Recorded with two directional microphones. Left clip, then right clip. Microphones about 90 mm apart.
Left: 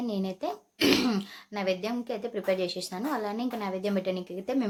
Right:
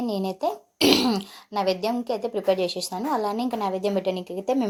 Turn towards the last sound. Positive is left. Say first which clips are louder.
# right 6 dB
turn(degrees=-30)  # may be behind; listen again after turning